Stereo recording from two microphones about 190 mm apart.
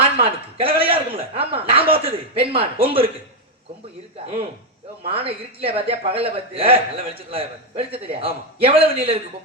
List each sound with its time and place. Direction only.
0.2 s a man's voice: 30° right (ahead or behind)
5.0 s speech: 30° right (ahead or behind)